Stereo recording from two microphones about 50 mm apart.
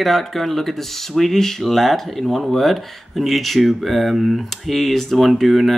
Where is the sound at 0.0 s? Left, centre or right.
Centre.